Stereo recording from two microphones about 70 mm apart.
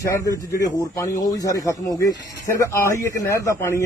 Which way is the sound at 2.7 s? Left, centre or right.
Left.